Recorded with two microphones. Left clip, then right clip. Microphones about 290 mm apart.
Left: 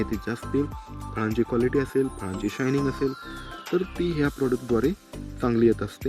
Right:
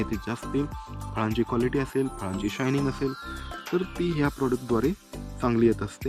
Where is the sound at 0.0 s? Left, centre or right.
Centre.